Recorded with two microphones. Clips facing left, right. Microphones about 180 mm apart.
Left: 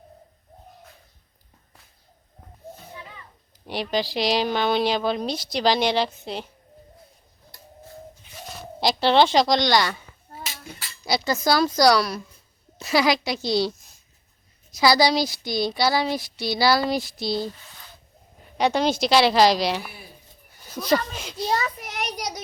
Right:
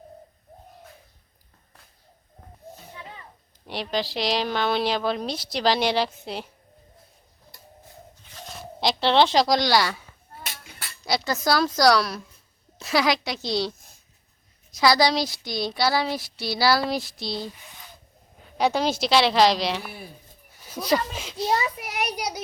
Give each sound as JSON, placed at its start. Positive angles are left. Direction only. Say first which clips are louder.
{"t": 3.7, "sound": "speech", "louder": "left 2 dB", "side_deg": 0}
{"t": 8.5, "sound": "speech", "louder": "left 1 dB", "side_deg": 0}
{"t": 10.4, "sound": "a sound", "louder": "left 2 dB", "side_deg": -60}
{"t": 11.0, "sound": "speech", "louder": "left 2 dB", "side_deg": 0}
{"t": 18.5, "sound": "a child's voice", "louder": "left 1 dB", "side_deg": -5}